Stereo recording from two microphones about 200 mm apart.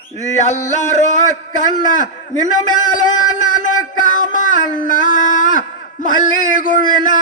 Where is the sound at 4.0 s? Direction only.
40° left (ahead or behind).